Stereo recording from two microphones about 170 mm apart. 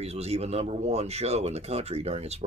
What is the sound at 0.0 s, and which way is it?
Speech, 40° right (ahead or behind).